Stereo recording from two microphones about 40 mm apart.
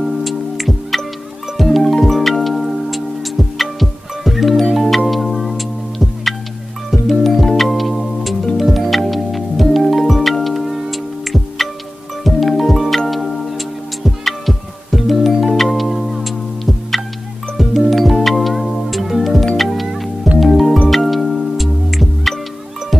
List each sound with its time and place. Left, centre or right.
0.0 s music: centre